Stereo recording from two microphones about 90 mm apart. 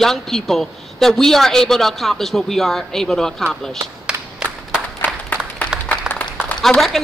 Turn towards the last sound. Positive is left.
turn(degrees=5)  # may be behind; listen again after turning